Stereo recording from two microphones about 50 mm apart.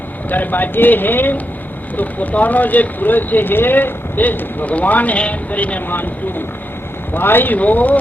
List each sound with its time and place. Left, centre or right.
0.3 s speech: left
7.1 s speech: left